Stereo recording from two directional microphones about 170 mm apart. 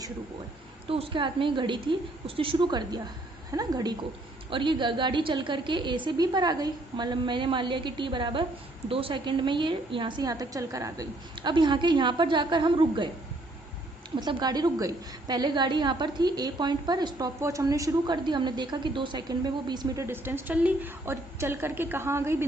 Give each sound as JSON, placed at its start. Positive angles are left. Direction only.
{"t": 0.9, "sound": "a woman's voice", "side_deg": -35}
{"t": 14.2, "sound": "a woman's voice", "side_deg": -25}
{"t": 20.1, "sound": "a woman's voice", "side_deg": -10}